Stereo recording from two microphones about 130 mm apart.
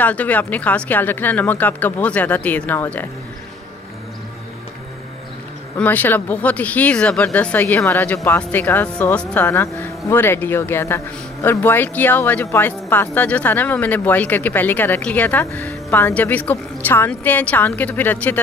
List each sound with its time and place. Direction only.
0.0 s speech: 10° left (ahead or behind)
5.8 s speech: 15° left (ahead or behind)